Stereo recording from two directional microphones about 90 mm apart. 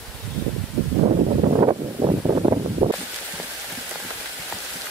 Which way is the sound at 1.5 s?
75° right (ahead or behind).